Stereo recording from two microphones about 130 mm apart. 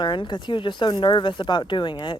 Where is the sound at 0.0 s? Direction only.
35° left (ahead or behind).